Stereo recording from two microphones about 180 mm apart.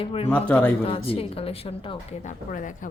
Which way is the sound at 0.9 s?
30° left (ahead or behind).